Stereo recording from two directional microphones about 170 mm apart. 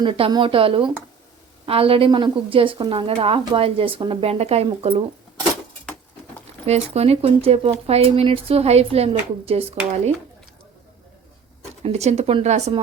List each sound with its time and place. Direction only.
0.0 s a woman's voice: 30° right (ahead or behind)
6.7 s a woman's voice: 40° right (ahead or behind)
11.8 s a woman's voice: 40° right (ahead or behind)